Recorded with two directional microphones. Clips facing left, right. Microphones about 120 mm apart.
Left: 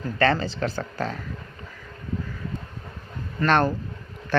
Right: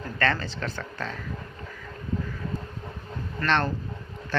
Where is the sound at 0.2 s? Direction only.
35° left (ahead or behind).